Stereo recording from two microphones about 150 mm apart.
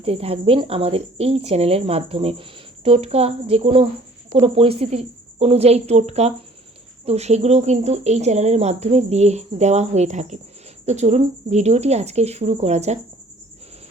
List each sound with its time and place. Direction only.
0.0 s speech: 40° right (ahead or behind)